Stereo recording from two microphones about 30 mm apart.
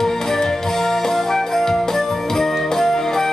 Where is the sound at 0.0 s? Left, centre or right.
Centre.